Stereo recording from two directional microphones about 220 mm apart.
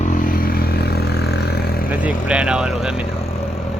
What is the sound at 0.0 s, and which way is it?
Vehicle, 35° left (ahead or behind).